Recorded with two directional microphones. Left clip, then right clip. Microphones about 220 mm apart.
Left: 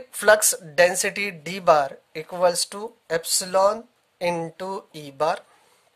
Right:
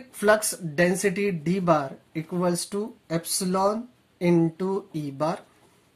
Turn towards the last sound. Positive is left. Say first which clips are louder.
# left 4 dB
turn(degrees=40)  # may be behind; listen again after turning